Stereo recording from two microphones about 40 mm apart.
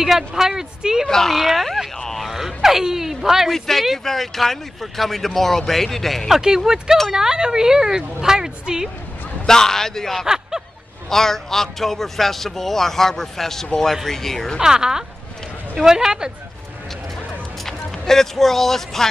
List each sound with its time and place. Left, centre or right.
0.0 s speech: centre
1.0 s speech: centre
2.0 s a sound: centre
2.2 s a sound: centre
3.4 s a man's voice: centre
6.4 s speech: centre
9.5 s a man's voice: centre
10.2 s snicker: centre
11.1 s a man's voice: centre
14.6 s speech: centre
17.6 s speech: centre